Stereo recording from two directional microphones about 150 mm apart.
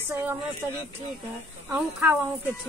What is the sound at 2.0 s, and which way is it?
Speech, 10° right (ahead or behind).